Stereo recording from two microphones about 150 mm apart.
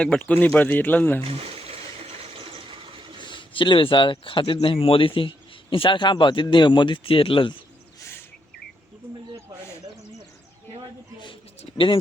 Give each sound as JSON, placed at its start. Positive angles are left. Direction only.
{"t": 0.0, "sound": "speech", "side_deg": 10}
{"t": 1.2, "sound": "a sound", "side_deg": -40}
{"t": 3.2, "sound": "speech", "side_deg": 35}